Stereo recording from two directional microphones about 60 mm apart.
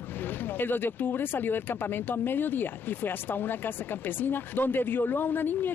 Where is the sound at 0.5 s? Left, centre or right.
Left.